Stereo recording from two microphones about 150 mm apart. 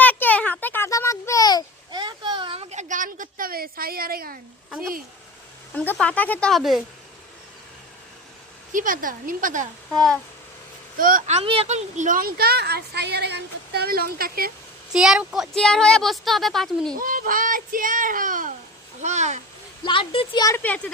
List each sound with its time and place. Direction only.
0.0 s a sound: 10° left (ahead or behind)
1.9 s a sound: 30° right (ahead or behind); by 4.4 s 80° right
5.7 s speech: 10° left (ahead or behind)
8.7 s a child's voice: 65° right (ahead or behind)
9.9 s speech: 5° left (ahead or behind)
10.9 s speech: 65° right (ahead or behind)
11.3 s a woman's voice: 40° right (ahead or behind); by 14.5 s 75° right (ahead or behind)
14.9 s speech: 5° right (ahead or behind)
17.0 s a child's voice: 65° right (ahead or behind)
19.0 s a child's voice: 50° right (ahead or behind)
19.8 s a woman's voice: 35° left (ahead or behind)
20.6 s speech: 10° left (ahead or behind)